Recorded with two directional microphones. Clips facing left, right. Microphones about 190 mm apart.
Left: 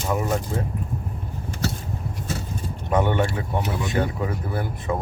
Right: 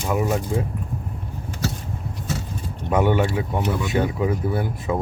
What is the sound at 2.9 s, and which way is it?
Speech, 5° right (ahead or behind).